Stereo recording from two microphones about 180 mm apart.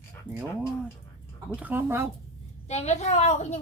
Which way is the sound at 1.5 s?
10° right (ahead or behind).